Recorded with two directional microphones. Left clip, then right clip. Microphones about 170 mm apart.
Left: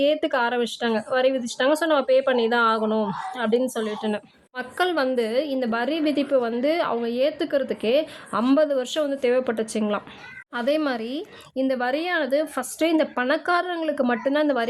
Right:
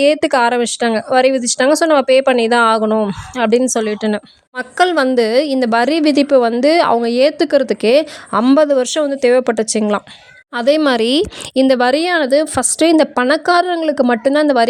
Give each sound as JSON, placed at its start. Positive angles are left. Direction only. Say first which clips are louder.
{"t": 0.0, "sound": "a woman's voice", "louder": "right 9 dB", "side_deg": -35}